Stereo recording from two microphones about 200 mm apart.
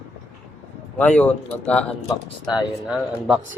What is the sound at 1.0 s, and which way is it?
Speech, 5° left (ahead or behind).